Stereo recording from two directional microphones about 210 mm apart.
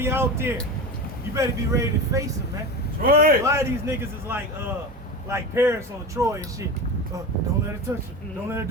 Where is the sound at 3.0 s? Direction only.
45° right (ahead or behind).